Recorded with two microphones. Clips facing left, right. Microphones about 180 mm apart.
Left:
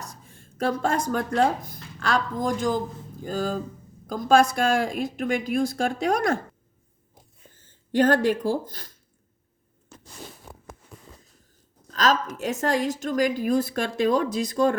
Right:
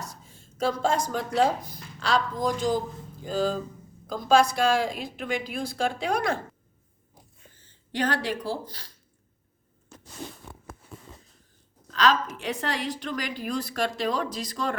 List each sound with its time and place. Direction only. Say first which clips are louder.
0.3 s a sound: left 1 dB; 55° left (ahead or behind)
0.8 s a woman's voice: left 1 dB; 55° left (ahead or behind)
7.5 s speech: left 9 dB; 50° left (ahead or behind)
11.9 s a woman's voice: left 1 dB; 40° left (ahead or behind)